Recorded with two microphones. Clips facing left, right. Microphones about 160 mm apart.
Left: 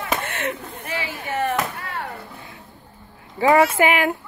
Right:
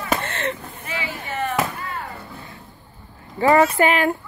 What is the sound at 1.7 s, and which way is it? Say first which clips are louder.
Chop: even; 70° left (ahead or behind).